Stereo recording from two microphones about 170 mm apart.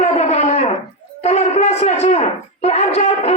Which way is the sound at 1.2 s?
40° left (ahead or behind).